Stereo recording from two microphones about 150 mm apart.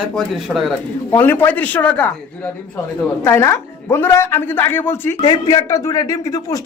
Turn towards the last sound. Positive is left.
turn(degrees=25)  # may be behind; listen again after turning